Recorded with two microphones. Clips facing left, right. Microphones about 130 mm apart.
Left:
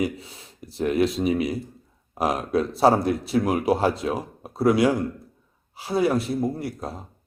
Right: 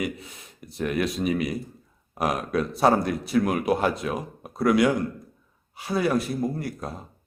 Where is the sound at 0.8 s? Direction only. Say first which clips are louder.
Left 4 dB; 25° left (ahead or behind).